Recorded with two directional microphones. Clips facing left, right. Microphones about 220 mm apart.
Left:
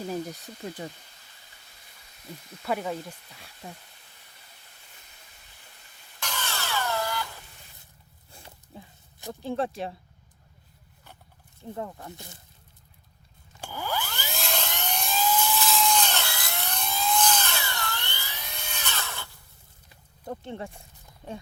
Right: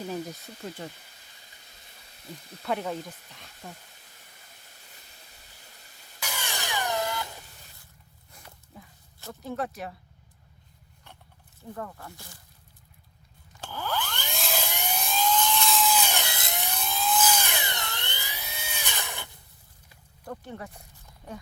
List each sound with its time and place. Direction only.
0.1 s speech: 15° left (ahead or behind)
2.6 s speech: 5° left (ahead or behind)
6.1 s a sound: 10° right (ahead or behind)
8.3 s a sound: 30° left (ahead or behind)
9.3 s speech: 30° left (ahead or behind)
11.7 s speech: 20° left (ahead or behind)
13.6 s helicopter: 10° left (ahead or behind); by 19.4 s 15° right (ahead or behind)
20.2 s speech: 25° left (ahead or behind)